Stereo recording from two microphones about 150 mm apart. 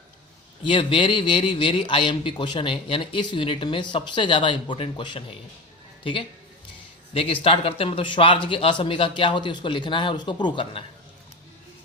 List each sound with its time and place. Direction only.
0.6 s speech: 35° left (ahead or behind)
7.1 s speech: 35° left (ahead or behind)